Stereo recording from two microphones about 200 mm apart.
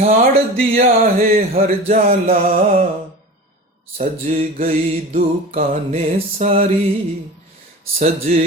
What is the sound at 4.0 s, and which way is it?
Music, 30° right (ahead or behind).